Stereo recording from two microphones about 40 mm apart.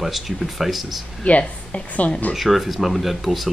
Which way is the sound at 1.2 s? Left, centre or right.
Left.